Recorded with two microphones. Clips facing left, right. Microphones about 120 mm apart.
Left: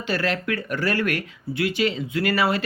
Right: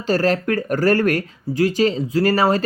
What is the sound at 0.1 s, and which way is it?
Speech, 40° right (ahead or behind).